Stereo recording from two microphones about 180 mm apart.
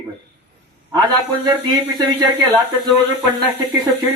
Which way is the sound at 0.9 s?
25° right (ahead or behind).